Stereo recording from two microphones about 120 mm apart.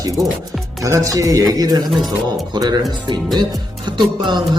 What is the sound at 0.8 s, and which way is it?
Speech, 25° right (ahead or behind).